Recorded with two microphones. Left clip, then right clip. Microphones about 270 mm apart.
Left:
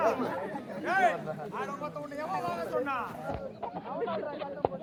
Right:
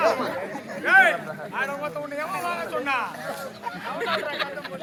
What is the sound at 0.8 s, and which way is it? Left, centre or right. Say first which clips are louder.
Speech: right 10 dB; right.